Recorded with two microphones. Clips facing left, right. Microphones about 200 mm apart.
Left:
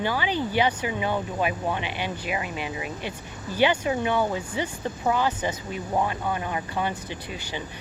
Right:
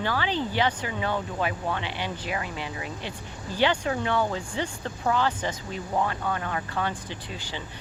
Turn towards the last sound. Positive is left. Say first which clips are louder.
# left 3 dB
turn(degrees=15)  # may be behind; listen again after turning